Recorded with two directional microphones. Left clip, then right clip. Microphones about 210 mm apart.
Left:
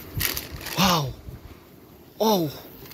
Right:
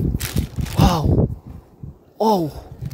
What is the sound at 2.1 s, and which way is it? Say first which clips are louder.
Speech: right 4 dB; 30° right (ahead or behind).